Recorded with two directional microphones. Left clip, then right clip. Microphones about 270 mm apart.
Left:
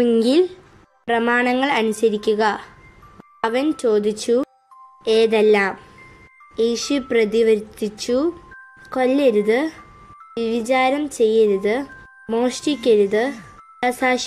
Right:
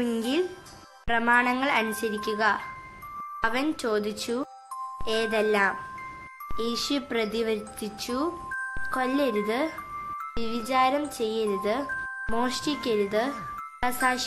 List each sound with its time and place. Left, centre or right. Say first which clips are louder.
0.0 s speech: left 11 dB; centre